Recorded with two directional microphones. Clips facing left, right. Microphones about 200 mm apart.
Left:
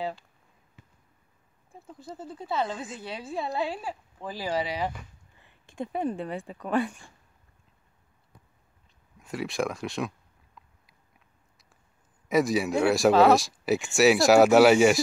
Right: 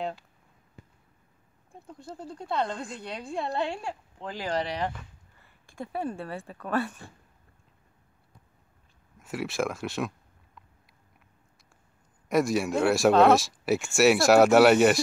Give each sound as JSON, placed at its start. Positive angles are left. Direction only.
{"t": 1.7, "sound": "a woman's voice", "side_deg": 0}
{"t": 5.7, "sound": "speech", "side_deg": 20}
{"t": 9.2, "sound": "a sound", "side_deg": 0}
{"t": 12.3, "sound": "a woman's voice", "side_deg": 0}